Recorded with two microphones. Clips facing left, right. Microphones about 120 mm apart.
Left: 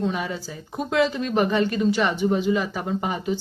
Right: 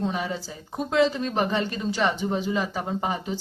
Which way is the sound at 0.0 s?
35° right (ahead or behind).